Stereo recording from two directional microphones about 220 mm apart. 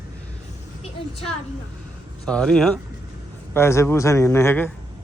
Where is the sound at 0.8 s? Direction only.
25° left (ahead or behind).